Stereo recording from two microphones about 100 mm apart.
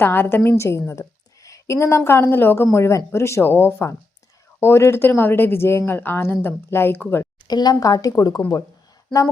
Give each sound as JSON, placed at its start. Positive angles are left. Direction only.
{"t": 0.0, "sound": "a woman's voice", "side_deg": 20}
{"t": 7.4, "sound": "speech", "side_deg": 45}